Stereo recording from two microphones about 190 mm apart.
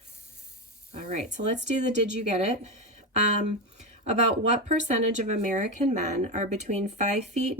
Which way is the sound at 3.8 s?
35° right (ahead or behind).